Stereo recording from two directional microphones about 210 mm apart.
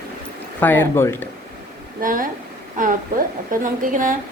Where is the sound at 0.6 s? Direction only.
10° left (ahead or behind).